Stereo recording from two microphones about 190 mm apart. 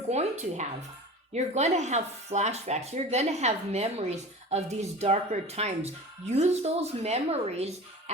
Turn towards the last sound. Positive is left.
turn(degrees=-35)  # may be behind; listen again after turning